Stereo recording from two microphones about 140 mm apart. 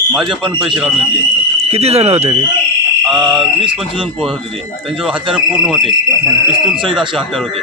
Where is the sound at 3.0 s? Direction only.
5° right (ahead or behind).